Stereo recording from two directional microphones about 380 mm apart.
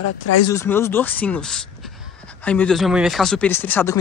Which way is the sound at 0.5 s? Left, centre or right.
Centre.